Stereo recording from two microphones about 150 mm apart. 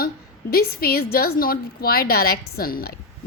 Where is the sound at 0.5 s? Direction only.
90° left.